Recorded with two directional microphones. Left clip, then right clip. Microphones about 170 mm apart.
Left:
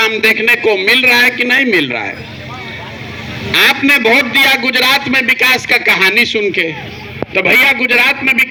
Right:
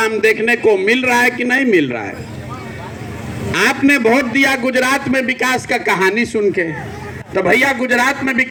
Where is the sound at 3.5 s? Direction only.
35° right (ahead or behind).